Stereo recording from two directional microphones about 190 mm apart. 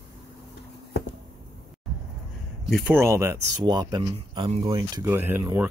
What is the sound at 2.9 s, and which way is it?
Speech, 15° right (ahead or behind).